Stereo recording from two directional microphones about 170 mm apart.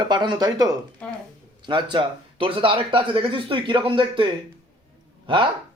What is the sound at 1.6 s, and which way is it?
Speech, 25° right (ahead or behind).